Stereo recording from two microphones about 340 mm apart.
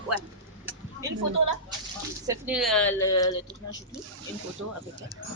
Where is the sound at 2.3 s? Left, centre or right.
Centre.